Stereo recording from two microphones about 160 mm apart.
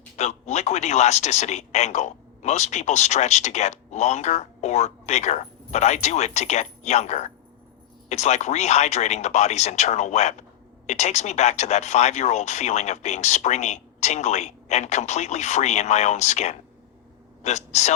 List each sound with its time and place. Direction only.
0.2 s speech: 45° left (ahead or behind)